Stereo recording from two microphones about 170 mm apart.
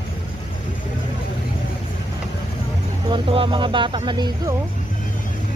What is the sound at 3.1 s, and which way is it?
Speech, 30° right (ahead or behind).